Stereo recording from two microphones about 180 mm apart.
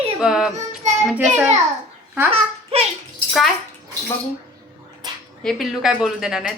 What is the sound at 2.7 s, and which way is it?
Speech, 35° right (ahead or behind).